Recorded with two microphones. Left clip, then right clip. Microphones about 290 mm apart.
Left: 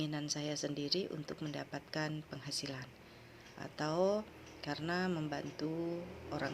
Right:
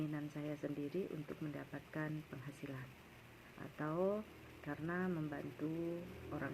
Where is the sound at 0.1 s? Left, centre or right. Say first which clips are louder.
Left 6 dB; left.